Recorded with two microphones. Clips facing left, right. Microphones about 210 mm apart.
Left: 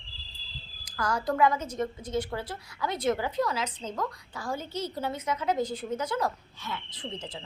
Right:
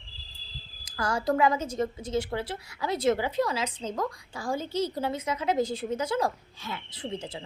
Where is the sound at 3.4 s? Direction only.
10° right (ahead or behind).